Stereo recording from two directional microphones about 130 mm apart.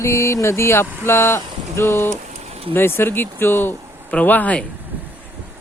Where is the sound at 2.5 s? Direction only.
50° right (ahead or behind).